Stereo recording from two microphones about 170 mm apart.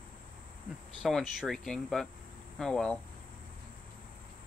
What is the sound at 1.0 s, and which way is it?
Speech, centre (ahead or behind).